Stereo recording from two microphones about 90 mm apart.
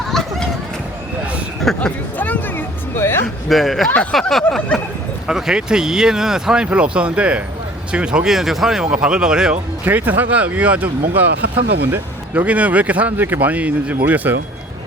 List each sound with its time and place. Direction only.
0.1 s run: 5° left (ahead or behind)
1.7 s speech: 5° left (ahead or behind)
2.1 s music: 20° left (ahead or behind)
3.5 s speech: centre (ahead or behind)
9.8 s speech: 20° right (ahead or behind)